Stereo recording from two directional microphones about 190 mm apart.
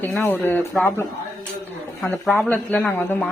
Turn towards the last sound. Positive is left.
turn(degrees=5)  # may be behind; listen again after turning